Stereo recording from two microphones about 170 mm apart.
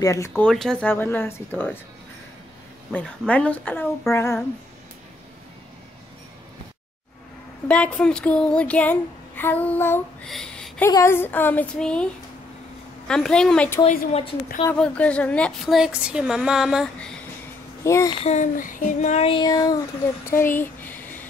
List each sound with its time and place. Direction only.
0.0 s speech: 20° left (ahead or behind)
0.4 s speech: 5° left (ahead or behind)
2.9 s speech: 5° left (ahead or behind)
7.6 s speech: 5° left (ahead or behind)
10.9 s speech: 15° left (ahead or behind)
13.1 s speech: 5° left (ahead or behind)
13.8 s child singing: 35° left (ahead or behind)
14.7 s speech: 10° left (ahead or behind)
17.8 s speech: 15° left (ahead or behind)
18.2 s child singing: 45° left (ahead or behind); by 19.8 s 25° left (ahead or behind)
20.2 s a sound: 15° left (ahead or behind)